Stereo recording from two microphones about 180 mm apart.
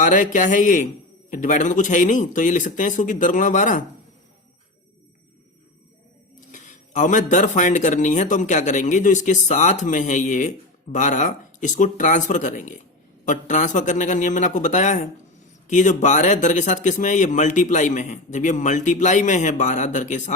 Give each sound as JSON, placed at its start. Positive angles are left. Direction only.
{"t": 0.0, "sound": "speech", "side_deg": 45}
{"t": 6.5, "sound": "speech", "side_deg": 40}